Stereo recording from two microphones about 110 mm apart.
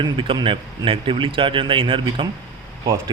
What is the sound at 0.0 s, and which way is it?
Speech, 50° right (ahead or behind).